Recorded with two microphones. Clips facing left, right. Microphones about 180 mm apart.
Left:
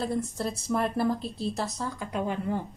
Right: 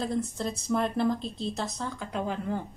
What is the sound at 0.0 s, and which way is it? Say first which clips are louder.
Speech: even; 5° left (ahead or behind).